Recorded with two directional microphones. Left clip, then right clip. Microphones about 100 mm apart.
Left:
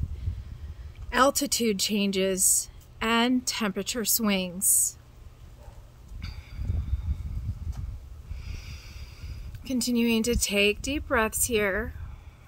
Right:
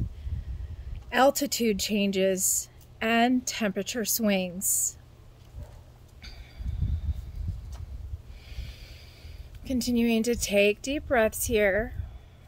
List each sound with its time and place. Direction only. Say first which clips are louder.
1.1 s speech: even; 25° left (ahead or behind)
8.5 s speech: left 2 dB; 35° left (ahead or behind)